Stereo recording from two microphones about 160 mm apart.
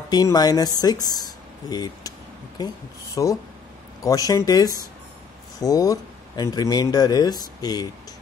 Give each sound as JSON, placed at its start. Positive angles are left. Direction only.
{"t": 0.1, "sound": "speech", "side_deg": 25}
{"t": 3.2, "sound": "speech", "side_deg": 25}